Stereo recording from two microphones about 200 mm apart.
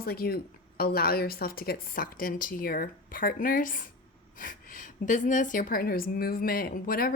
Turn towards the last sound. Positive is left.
turn(degrees=45)  # may be behind; listen again after turning